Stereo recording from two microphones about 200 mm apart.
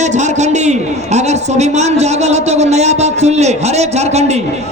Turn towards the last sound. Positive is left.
turn(degrees=-35)  # may be behind; listen again after turning